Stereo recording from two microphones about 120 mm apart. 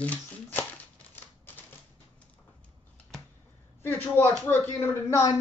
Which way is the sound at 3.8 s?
15° left (ahead or behind).